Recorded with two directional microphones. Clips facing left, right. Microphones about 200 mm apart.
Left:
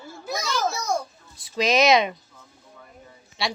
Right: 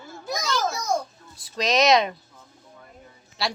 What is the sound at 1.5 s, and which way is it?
Speech, 5° left (ahead or behind).